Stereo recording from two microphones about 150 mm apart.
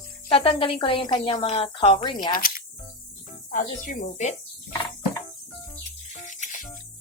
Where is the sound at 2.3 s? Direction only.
70° left (ahead or behind).